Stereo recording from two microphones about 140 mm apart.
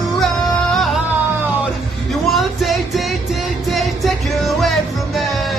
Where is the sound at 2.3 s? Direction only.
Centre (ahead or behind).